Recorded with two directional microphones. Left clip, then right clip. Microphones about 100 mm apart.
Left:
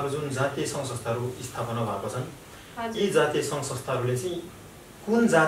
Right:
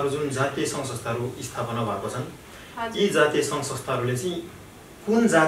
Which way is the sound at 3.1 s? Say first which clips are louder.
Right 2 dB; centre (ahead or behind).